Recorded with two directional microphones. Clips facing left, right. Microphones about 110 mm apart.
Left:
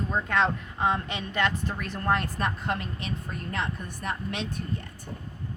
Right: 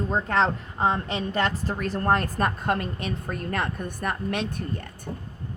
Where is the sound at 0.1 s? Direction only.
35° right (ahead or behind); by 4.9 s 50° right (ahead or behind).